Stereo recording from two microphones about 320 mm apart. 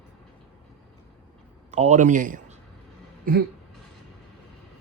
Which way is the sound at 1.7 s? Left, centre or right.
Right.